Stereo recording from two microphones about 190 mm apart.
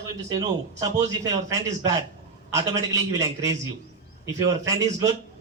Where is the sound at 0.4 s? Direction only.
20° right (ahead or behind).